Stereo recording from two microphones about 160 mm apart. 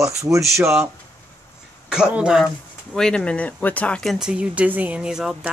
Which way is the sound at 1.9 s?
5° right (ahead or behind).